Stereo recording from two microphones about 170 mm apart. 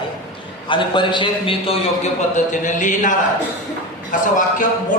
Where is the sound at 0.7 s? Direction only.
30° left (ahead or behind).